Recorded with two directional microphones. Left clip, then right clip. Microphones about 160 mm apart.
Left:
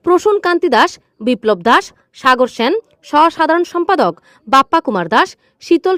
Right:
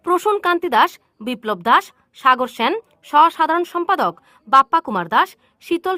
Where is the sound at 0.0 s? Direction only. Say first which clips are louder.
Left 6 dB; 35° left (ahead or behind).